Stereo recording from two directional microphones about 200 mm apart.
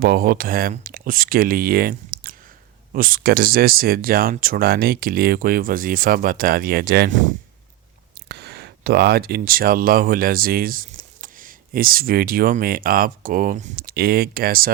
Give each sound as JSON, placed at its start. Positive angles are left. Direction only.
{"t": 0.0, "sound": "speech", "side_deg": -50}
{"t": 8.3, "sound": "speech", "side_deg": -55}